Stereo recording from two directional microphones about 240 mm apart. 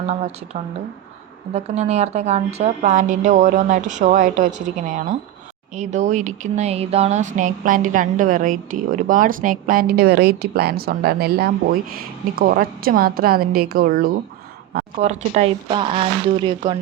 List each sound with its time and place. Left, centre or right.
0.0 s speech: right
15.0 s speech: right